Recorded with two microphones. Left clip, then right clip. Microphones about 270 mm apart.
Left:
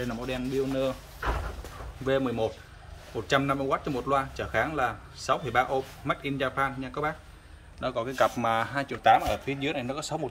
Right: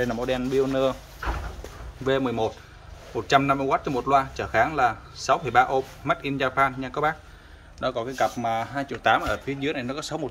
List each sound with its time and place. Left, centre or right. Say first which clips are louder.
0.0 s speech: right 7 dB; centre
2.0 s speech: right 3 dB; centre